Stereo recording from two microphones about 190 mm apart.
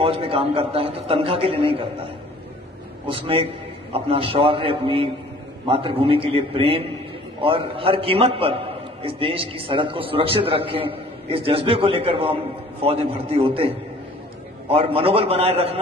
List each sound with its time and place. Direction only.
0.0 s a man's voice: 30° right (ahead or behind)
3.1 s a man's voice: 30° right (ahead or behind)